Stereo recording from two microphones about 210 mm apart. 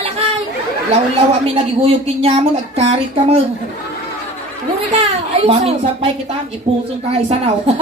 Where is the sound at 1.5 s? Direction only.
30° right (ahead or behind).